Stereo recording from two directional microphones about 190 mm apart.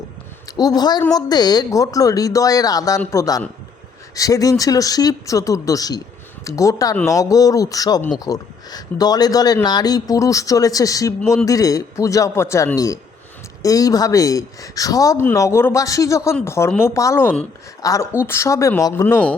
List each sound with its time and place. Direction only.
0.5 s speech: 20° left (ahead or behind)
11.2 s speech: 5° left (ahead or behind)
11.4 s speech: 20° left (ahead or behind)